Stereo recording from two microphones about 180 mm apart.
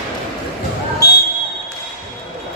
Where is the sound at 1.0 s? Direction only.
60° left (ahead or behind).